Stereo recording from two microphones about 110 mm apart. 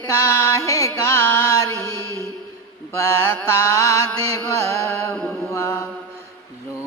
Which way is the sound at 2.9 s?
25° left (ahead or behind).